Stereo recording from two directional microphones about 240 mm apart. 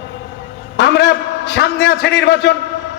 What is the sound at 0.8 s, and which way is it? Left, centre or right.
A man's voice, left.